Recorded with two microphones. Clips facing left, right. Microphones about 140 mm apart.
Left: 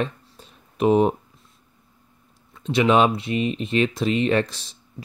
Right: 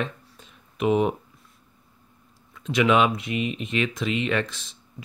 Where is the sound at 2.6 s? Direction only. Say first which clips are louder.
Left 2 dB; 30° left (ahead or behind).